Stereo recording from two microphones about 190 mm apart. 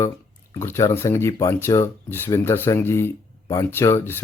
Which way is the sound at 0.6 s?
15° left (ahead or behind).